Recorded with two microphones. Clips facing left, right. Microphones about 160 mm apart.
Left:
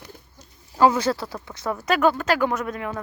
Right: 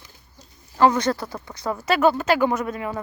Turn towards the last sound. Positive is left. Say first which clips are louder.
# right 2 dB
turn(degrees=-5)  # may be behind; listen again after turning